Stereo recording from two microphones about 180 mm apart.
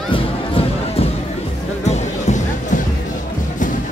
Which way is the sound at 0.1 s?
30° left (ahead or behind).